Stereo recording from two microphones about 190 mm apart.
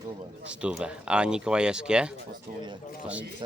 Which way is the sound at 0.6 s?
5° right (ahead or behind).